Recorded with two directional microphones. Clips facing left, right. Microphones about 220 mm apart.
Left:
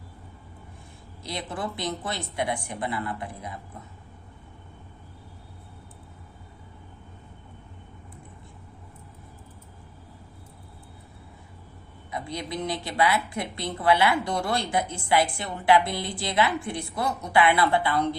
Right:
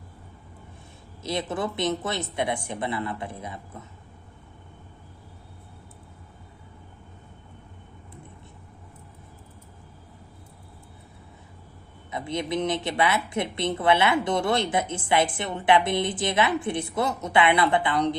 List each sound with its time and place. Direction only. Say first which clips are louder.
1.2 s speech: right 5 dB; 25° right (ahead or behind)
12.1 s speech: right 5 dB; 25° right (ahead or behind)